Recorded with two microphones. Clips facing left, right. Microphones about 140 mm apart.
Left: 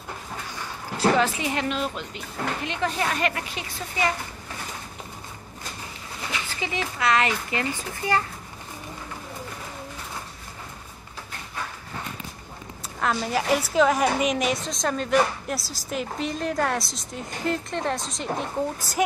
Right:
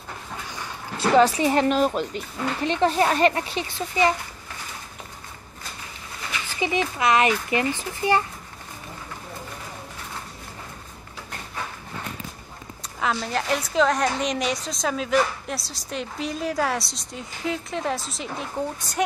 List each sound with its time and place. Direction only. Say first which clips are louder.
0.9 s a woman's voice: right 4 dB; 35° right (ahead or behind)
2.6 s a woman's voice: right 9 dB; 30° right (ahead or behind)
6.5 s a child's voice: right 9 dB; 20° right (ahead or behind)
13.0 s a woman's voice: left 1 dB; centre (ahead or behind)